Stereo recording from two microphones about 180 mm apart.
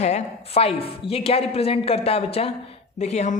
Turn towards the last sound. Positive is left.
turn(degrees=40)  # may be behind; listen again after turning